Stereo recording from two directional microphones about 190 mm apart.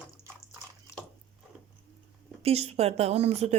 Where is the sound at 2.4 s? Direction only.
35° right (ahead or behind).